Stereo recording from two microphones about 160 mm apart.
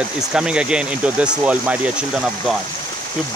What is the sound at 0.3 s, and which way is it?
Speech, 5° right (ahead or behind).